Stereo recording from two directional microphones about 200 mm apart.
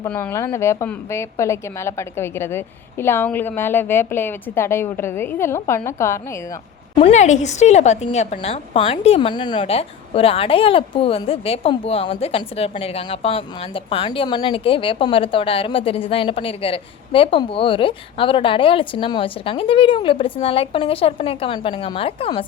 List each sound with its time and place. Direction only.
0.0 s a woman's voice: 10° left (ahead or behind)
6.9 s a woman's voice: 30° left (ahead or behind)